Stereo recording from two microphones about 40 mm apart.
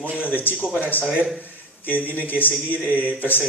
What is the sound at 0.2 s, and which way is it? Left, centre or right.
Speech, left.